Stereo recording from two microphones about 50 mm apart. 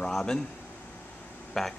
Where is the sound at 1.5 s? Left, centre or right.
Centre.